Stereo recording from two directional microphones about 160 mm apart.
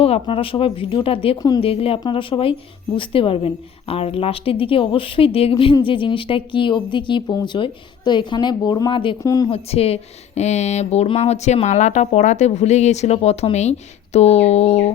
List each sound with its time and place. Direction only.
0.0 s speech: 35° left (ahead or behind)
1.4 s a woman's voice: 25° left (ahead or behind)
9.2 s a woman's voice: 20° left (ahead or behind)
9.5 s speech: 40° left (ahead or behind)